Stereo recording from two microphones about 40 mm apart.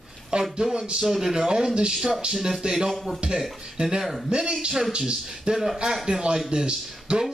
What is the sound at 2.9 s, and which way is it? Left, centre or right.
Speech, centre.